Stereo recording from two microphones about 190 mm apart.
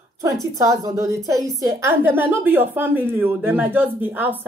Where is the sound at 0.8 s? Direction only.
20° right (ahead or behind).